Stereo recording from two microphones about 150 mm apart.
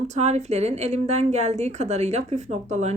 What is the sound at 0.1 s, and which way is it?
A woman's voice, 50° right (ahead or behind).